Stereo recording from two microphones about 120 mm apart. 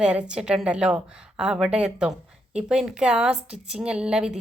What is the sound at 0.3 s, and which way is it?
A woman's voice, 5° right (ahead or behind).